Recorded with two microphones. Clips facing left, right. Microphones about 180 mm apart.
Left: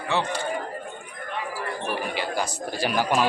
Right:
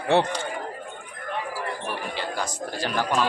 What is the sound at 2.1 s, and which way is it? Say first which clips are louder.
A man's voice: left 2 dB; 10° left (ahead or behind).